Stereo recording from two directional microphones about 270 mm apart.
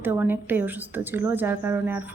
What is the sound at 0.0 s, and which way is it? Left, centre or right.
A woman's voice, centre.